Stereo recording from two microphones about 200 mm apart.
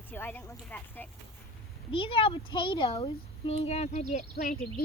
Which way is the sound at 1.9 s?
25° left (ahead or behind).